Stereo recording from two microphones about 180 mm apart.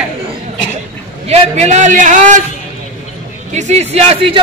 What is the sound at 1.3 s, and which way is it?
A man's voice, 40° right (ahead or behind).